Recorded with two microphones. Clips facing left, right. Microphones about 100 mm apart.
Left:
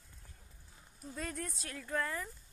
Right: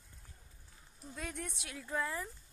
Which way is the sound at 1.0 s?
Centre (ahead or behind).